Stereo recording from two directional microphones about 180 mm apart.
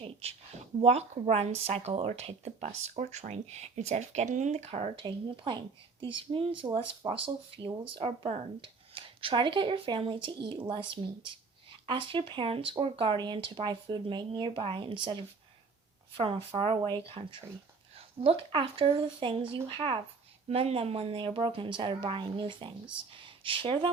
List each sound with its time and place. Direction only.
0.0 s a woman's voice: 35° right (ahead or behind)